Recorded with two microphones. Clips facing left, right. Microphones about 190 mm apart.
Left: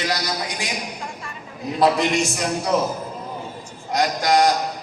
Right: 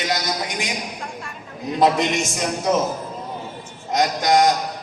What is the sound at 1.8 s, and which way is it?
A man's voice, 20° right (ahead or behind).